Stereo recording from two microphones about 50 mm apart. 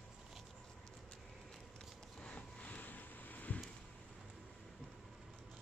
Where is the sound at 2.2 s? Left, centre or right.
Left.